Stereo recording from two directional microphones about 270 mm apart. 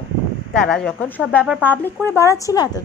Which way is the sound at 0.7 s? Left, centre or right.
Centre.